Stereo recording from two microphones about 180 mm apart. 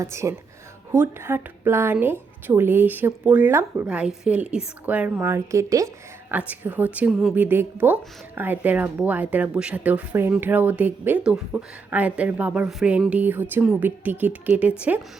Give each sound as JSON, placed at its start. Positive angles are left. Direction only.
{"t": 0.0, "sound": "speech", "side_deg": -15}